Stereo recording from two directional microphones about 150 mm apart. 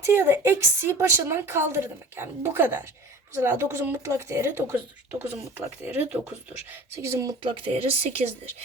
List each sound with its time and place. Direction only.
0.0 s a woman's voice: 15° right (ahead or behind)
6.7 s speech: 20° right (ahead or behind)
7.4 s speech: 35° right (ahead or behind)